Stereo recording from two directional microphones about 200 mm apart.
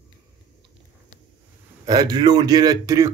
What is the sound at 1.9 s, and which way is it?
Speech, 20° right (ahead or behind).